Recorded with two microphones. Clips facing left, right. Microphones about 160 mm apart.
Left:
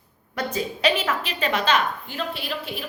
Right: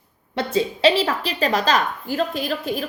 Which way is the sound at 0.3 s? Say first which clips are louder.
Right 5 dB; 30° right (ahead or behind).